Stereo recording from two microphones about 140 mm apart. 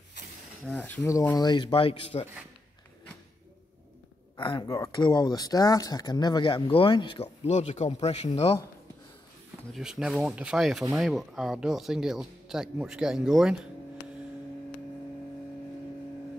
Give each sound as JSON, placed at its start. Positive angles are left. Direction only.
{"t": 0.7, "sound": "speech", "side_deg": 10}
{"t": 4.4, "sound": "speech", "side_deg": 30}
{"t": 7.4, "sound": "speech", "side_deg": 55}
{"t": 9.8, "sound": "speech", "side_deg": -5}